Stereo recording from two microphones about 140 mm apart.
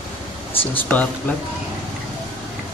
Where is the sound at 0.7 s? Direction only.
10° left (ahead or behind).